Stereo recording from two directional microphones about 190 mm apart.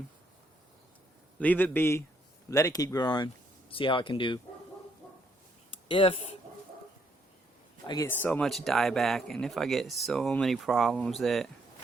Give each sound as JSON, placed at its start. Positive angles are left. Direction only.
{"t": 1.4, "sound": "speech", "side_deg": 10}
{"t": 5.9, "sound": "speech", "side_deg": 30}
{"t": 7.9, "sound": "speech", "side_deg": 15}